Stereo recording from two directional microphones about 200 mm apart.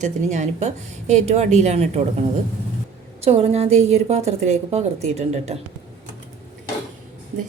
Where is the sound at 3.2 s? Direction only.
30° right (ahead or behind).